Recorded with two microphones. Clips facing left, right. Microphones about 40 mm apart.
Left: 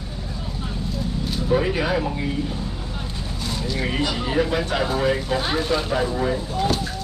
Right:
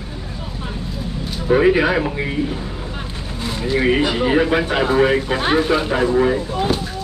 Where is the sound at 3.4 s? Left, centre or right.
Right.